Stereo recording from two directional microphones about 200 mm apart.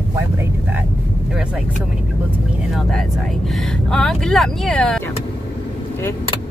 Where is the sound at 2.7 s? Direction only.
Centre (ahead or behind).